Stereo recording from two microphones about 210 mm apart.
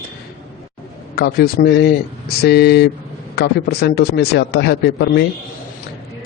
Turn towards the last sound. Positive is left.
turn(degrees=50)  # may be behind; listen again after turning